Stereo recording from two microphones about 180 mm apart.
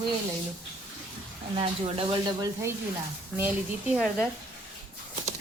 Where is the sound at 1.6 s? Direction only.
30° right (ahead or behind).